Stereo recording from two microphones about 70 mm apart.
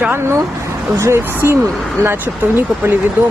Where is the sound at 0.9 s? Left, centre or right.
Right.